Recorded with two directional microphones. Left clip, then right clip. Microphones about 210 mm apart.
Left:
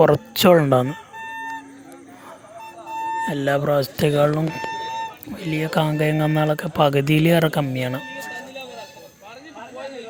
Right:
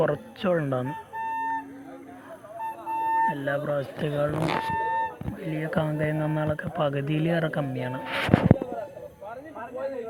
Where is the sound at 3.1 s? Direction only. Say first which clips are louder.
Left 5 dB; 60° left (ahead or behind).